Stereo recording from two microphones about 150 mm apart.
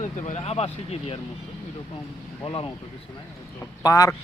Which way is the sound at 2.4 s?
35° left (ahead or behind).